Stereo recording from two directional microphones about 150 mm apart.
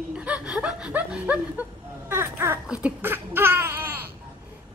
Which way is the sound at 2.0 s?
15° right (ahead or behind).